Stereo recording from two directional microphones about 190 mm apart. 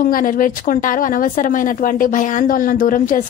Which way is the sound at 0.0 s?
45° left (ahead or behind).